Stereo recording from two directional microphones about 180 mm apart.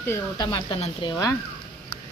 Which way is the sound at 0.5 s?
30° left (ahead or behind).